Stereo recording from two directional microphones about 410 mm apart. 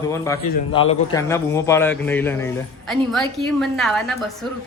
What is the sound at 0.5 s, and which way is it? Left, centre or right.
Speech, centre.